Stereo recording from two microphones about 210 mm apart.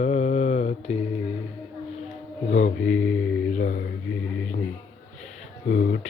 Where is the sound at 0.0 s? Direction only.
35° left (ahead or behind).